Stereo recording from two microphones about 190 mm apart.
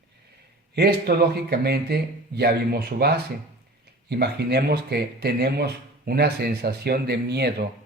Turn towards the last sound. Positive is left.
turn(degrees=-60)  # may be behind; listen again after turning